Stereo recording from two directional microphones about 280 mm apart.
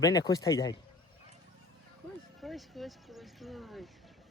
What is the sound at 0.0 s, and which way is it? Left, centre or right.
Speech, centre.